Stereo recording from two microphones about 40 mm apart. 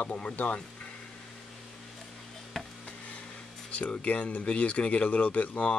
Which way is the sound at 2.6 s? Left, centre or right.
Centre.